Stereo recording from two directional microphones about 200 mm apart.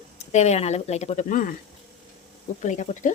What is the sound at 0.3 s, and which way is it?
Speech, 35° left (ahead or behind).